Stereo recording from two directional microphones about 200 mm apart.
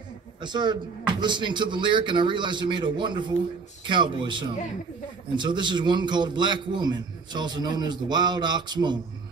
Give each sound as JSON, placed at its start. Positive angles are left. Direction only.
{"t": 0.4, "sound": "a man's voice", "side_deg": -20}